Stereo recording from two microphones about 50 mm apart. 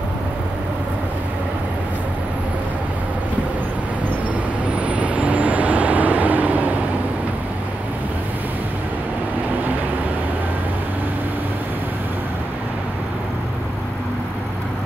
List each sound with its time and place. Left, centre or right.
4.8 s vehicle: right